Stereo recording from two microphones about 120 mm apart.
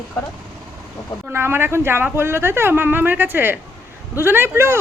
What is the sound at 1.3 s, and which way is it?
A woman's voice, 20° right (ahead or behind).